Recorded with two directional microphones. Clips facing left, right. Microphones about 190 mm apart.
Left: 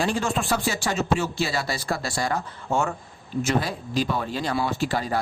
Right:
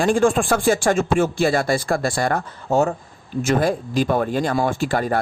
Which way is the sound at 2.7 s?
40° right (ahead or behind).